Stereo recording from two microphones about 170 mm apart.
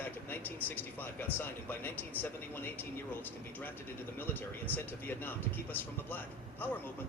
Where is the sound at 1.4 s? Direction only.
10° left (ahead or behind).